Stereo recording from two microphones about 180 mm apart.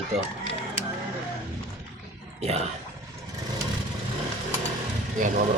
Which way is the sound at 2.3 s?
35° right (ahead or behind).